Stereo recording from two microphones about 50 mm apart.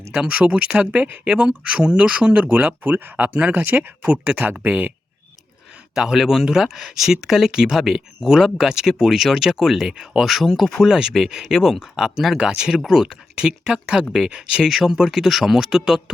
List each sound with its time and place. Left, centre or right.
0.1 s speech: centre
1.3 s speech: centre; by 3.9 s right
4.0 s speech: right
4.6 s speech: right
6.0 s speech: centre
10.8 s speech: centre
11.4 s speech: centre
14.7 s speech: centre